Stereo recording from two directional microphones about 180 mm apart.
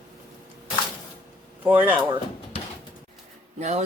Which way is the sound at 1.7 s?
10° right (ahead or behind).